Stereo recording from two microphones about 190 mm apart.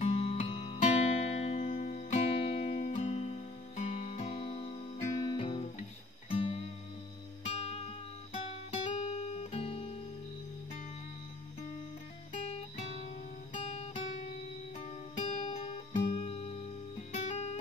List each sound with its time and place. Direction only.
0.0 s music: 35° left (ahead or behind)
12.4 s music: 30° left (ahead or behind)